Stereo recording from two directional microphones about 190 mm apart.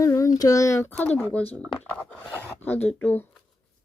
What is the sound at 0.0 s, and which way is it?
Child singing, 15° left (ahead or behind).